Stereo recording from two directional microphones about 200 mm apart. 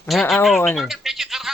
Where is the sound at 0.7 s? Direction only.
Centre (ahead or behind).